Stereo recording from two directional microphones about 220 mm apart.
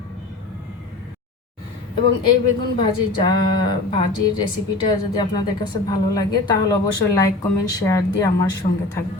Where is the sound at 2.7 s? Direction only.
20° left (ahead or behind).